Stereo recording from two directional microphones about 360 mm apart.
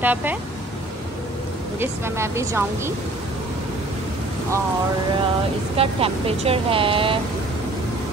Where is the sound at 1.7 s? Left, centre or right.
Centre.